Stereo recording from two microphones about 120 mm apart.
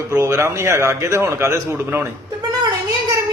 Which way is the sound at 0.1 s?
25° right (ahead or behind).